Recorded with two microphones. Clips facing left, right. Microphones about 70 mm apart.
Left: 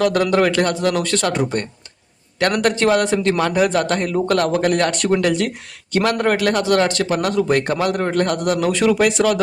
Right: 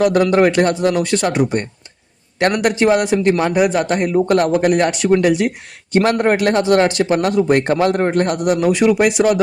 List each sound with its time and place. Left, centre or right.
0.0 s a man's voice: right